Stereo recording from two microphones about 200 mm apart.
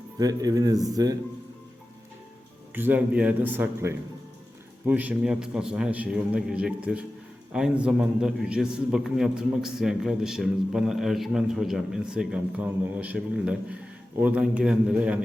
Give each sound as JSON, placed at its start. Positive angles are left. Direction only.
{"t": 0.2, "sound": "a man's voice", "side_deg": -20}
{"t": 2.7, "sound": "a man's voice", "side_deg": -10}